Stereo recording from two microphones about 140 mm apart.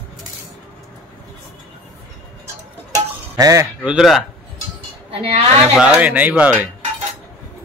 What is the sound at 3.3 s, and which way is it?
Speech, 20° right (ahead or behind).